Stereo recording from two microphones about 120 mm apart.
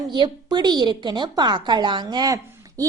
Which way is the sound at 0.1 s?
40° right (ahead or behind).